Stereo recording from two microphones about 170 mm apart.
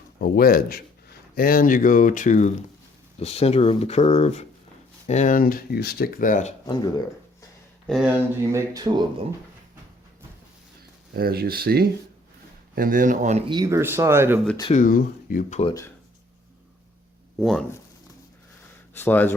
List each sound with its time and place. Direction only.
0.2 s speech: 60° left (ahead or behind)
3.2 s speech: 35° left (ahead or behind)
7.9 s speech: 5° right (ahead or behind)
8.7 s speech: 25° right (ahead or behind)
11.1 s speech: 65° right (ahead or behind); by 13.4 s 45° right (ahead or behind)
13.5 s speech: 20° right (ahead or behind)
14.7 s speech: 50° left (ahead or behind)
17.3 s speech: centre (ahead or behind)
18.9 s speech: 10° left (ahead or behind)